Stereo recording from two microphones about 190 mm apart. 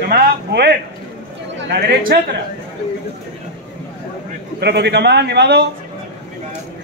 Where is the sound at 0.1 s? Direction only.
60° right (ahead or behind).